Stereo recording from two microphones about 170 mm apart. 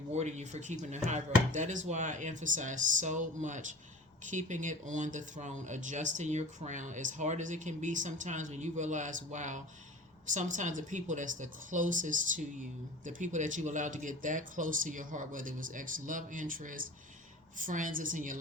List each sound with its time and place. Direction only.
0.1 s speech: 40° right (ahead or behind)